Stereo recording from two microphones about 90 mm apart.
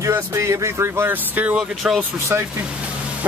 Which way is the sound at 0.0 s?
35° right (ahead or behind).